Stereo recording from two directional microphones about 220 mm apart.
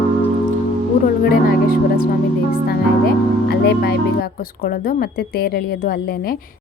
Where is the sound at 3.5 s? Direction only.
50° left (ahead or behind).